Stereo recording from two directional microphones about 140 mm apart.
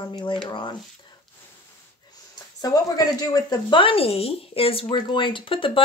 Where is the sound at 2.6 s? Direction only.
30° left (ahead or behind).